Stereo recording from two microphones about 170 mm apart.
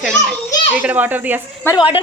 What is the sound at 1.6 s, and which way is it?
Speech, 15° left (ahead or behind).